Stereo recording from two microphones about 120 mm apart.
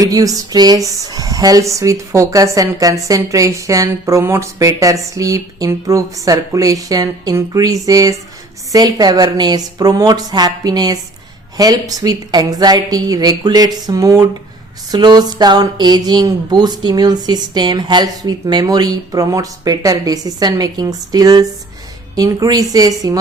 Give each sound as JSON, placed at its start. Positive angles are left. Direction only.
{"t": 0.0, "sound": "speech", "side_deg": -30}